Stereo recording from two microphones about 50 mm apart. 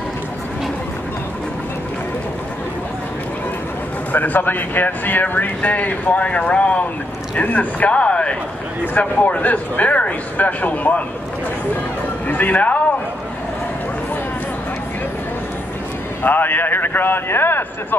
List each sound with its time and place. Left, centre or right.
4.1 s speech: left
8.9 s speech: left
12.3 s speech: left
16.2 s speech: left